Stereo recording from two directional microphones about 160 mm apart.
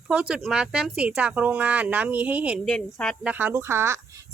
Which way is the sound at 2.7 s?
5° left (ahead or behind).